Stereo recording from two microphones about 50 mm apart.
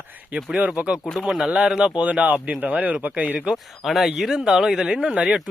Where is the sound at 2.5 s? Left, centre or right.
Right.